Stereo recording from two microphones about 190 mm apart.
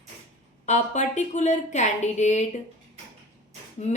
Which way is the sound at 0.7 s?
40° left (ahead or behind).